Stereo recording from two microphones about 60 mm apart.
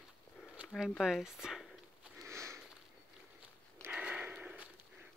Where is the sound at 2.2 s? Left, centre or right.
Right.